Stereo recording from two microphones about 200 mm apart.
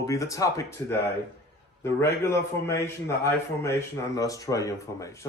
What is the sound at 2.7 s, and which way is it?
A man's voice, 15° left (ahead or behind).